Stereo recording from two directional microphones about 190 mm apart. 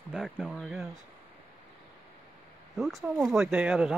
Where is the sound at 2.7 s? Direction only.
Centre (ahead or behind).